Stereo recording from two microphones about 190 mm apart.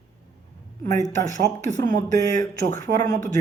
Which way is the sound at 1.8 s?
50° right (ahead or behind).